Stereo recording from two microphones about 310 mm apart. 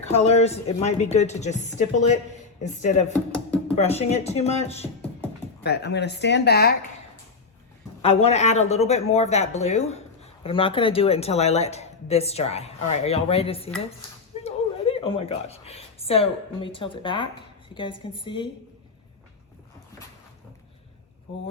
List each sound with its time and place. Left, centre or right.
0.2 s a woman's voice: left
5.6 s speech: left
8.0 s a woman's voice: centre